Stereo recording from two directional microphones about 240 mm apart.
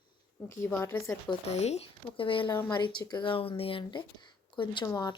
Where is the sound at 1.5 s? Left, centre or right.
Left.